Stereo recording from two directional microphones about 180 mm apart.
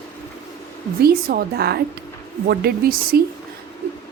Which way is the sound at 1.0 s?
60° right (ahead or behind).